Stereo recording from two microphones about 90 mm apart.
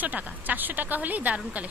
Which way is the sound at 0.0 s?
20° right (ahead or behind).